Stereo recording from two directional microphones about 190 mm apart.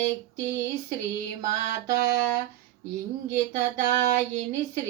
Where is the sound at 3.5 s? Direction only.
40° right (ahead or behind).